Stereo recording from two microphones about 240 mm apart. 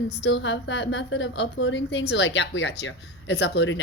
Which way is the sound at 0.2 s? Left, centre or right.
Left.